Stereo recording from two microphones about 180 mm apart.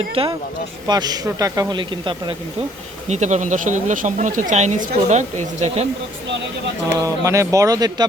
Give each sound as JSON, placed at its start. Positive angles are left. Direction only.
{"t": 0.2, "sound": "speech", "side_deg": -30}
{"t": 3.1, "sound": "speech", "side_deg": -40}
{"t": 7.0, "sound": "speech", "side_deg": -15}